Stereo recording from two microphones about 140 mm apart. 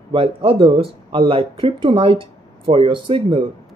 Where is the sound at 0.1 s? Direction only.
40° right (ahead or behind).